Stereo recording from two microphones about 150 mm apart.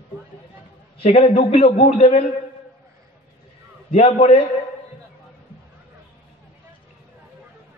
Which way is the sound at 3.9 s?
40° left (ahead or behind).